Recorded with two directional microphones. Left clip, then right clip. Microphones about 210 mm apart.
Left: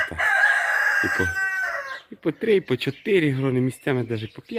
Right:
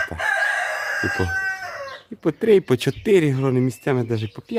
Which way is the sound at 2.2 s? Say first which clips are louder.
Right 4 dB; 15° right (ahead or behind).